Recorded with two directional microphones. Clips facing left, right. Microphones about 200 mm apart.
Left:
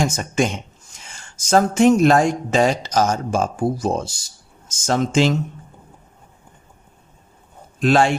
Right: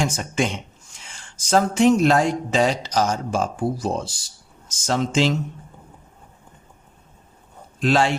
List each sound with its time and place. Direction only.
0.0 s speech: 45° left (ahead or behind)
7.8 s a man's voice: 50° left (ahead or behind)